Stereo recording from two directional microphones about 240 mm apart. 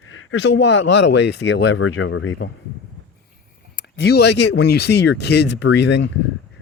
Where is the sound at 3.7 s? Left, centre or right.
Left.